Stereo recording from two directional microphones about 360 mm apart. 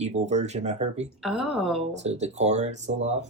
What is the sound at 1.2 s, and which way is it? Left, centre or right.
Speech, centre.